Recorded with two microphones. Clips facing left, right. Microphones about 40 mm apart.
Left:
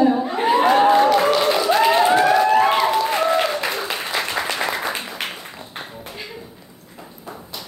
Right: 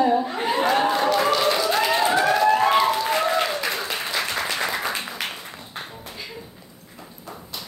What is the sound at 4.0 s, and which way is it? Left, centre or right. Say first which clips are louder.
Applause: left 2 dB; centre.